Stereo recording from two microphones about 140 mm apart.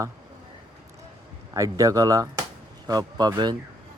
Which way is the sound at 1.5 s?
25° right (ahead or behind).